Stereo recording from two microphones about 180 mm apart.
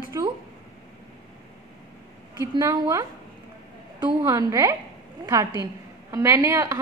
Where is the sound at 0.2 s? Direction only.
20° right (ahead or behind).